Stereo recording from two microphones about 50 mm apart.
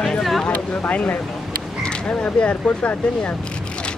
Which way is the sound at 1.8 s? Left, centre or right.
Left.